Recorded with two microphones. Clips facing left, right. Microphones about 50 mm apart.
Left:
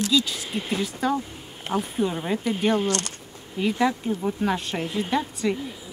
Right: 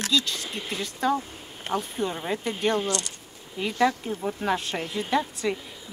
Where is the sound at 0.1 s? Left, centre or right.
Centre.